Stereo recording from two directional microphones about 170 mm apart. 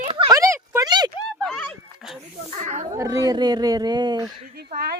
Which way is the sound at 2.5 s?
45° right (ahead or behind).